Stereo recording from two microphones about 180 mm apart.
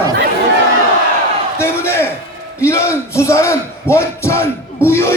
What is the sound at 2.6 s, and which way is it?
Speech, 15° left (ahead or behind).